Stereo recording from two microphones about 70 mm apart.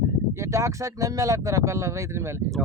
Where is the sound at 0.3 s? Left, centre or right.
Right.